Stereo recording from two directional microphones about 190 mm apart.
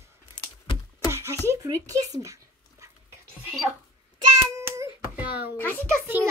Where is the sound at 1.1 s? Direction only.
15° right (ahead or behind).